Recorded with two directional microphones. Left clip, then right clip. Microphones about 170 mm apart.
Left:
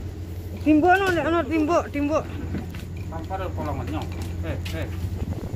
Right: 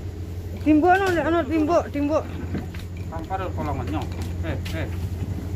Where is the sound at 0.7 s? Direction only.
15° left (ahead or behind).